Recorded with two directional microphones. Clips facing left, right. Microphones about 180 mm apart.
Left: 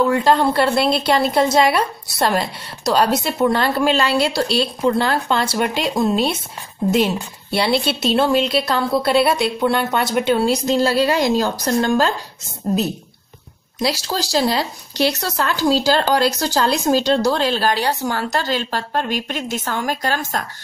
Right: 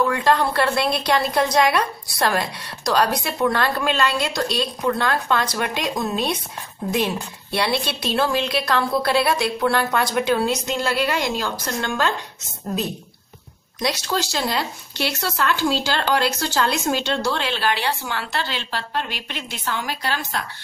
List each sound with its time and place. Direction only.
0.0 s a woman's voice: 25° left (ahead or behind)
13.8 s speech: 30° left (ahead or behind)